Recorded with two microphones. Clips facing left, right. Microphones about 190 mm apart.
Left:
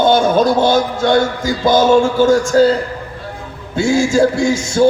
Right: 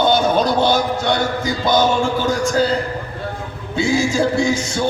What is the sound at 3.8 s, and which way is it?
A man's voice, 45° left (ahead or behind).